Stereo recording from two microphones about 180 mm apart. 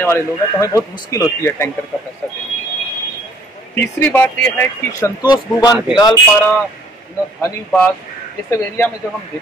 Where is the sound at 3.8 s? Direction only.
10° left (ahead or behind).